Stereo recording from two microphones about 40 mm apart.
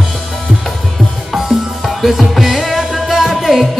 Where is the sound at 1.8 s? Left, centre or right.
Centre.